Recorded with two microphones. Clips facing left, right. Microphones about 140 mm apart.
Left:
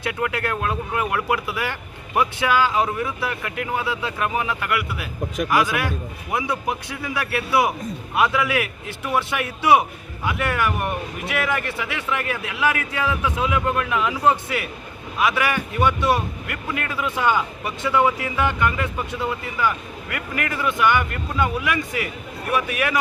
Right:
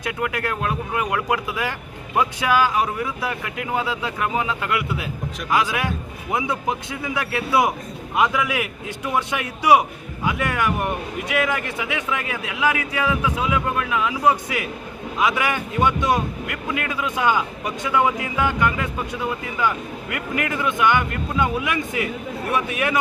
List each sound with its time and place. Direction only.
0.0 s speech: 15° right (ahead or behind)
7.2 s speech: 20° right (ahead or behind)